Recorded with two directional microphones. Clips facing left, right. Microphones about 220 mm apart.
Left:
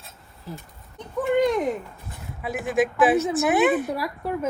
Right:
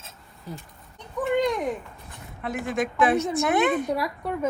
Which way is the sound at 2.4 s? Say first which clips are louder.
Left 4 dB; centre (ahead or behind).